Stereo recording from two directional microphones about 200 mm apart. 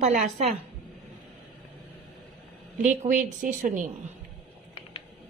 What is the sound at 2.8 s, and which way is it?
A woman's voice, 40° right (ahead or behind).